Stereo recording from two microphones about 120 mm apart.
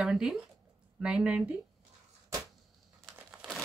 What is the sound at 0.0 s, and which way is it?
Speech, 5° right (ahead or behind).